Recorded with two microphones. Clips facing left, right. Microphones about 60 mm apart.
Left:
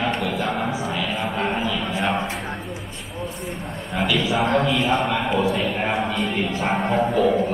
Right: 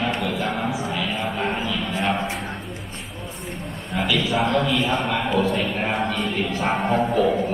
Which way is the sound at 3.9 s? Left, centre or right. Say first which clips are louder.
Left 1 dB; centre.